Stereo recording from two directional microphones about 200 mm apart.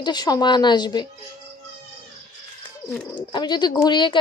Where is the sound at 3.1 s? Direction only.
20° left (ahead or behind).